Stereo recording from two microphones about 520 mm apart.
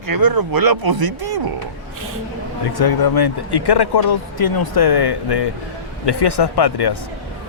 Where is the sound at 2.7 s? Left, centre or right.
Left.